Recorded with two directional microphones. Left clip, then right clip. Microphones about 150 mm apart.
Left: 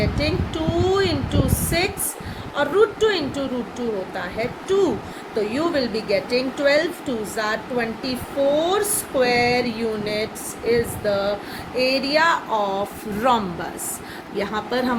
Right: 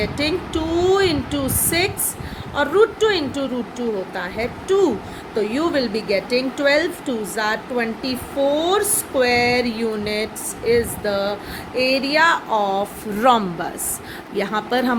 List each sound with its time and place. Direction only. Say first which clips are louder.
0.0 s speech: right 2 dB; 60° right (ahead or behind)
14.3 s speech: right 3 dB; 65° right (ahead or behind)